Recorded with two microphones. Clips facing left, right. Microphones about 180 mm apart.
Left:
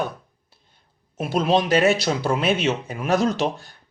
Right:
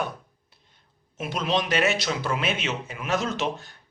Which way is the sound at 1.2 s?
35° left (ahead or behind).